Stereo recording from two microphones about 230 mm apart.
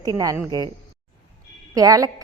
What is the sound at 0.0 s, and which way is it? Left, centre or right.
Speech, centre.